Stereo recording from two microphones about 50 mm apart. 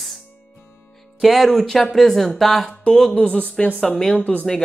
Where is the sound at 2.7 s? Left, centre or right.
Centre.